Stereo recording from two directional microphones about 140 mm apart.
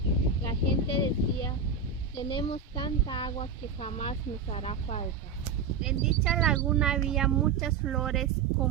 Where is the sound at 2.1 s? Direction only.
40° left (ahead or behind).